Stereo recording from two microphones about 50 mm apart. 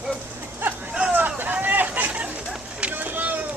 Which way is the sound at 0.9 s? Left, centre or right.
Right.